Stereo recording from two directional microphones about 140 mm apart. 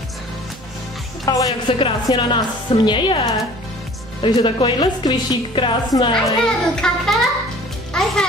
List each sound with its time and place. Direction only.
1.2 s music: 25° left (ahead or behind)
1.7 s a woman's voice: 40° left (ahead or behind)
6.4 s a child's voice: 5° left (ahead or behind)
7.9 s music: 5° left (ahead or behind)